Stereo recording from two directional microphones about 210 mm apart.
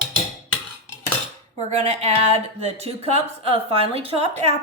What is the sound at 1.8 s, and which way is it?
A woman's voice, 30° right (ahead or behind).